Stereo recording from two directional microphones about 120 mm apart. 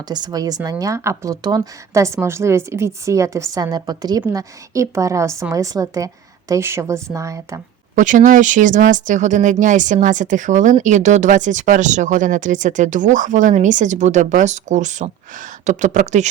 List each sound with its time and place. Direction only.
0.0 s speech: 35° right (ahead or behind)
1.9 s a woman's voice: 25° right (ahead or behind)
7.9 s speech: 90° right